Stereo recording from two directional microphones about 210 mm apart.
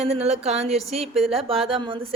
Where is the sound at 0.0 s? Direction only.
30° right (ahead or behind).